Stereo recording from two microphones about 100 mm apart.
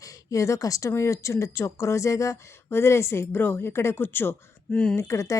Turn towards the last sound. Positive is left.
turn(degrees=30)  # may be behind; listen again after turning